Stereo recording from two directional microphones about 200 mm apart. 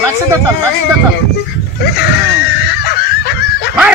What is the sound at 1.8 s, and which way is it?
Wheeze, 50° left (ahead or behind).